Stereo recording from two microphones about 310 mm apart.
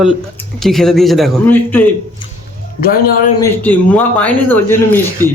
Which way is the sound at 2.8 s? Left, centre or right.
Left.